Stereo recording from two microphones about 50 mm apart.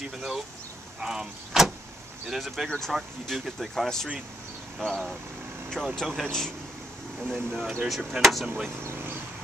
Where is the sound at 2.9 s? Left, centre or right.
Centre.